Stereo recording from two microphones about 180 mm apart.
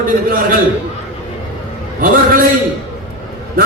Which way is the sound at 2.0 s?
50° right (ahead or behind).